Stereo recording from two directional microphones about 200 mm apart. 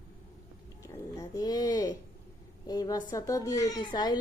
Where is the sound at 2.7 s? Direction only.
20° left (ahead or behind).